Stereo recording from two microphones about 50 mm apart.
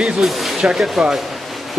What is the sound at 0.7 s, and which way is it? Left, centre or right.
Speech, centre.